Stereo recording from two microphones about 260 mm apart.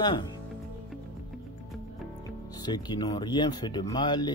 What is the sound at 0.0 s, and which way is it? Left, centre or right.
Speech, centre.